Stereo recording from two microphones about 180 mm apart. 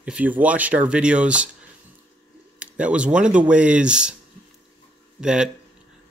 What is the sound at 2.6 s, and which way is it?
Speech, 5° right (ahead or behind).